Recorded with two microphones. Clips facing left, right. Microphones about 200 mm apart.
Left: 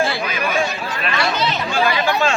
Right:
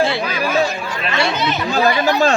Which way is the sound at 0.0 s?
30° right (ahead or behind).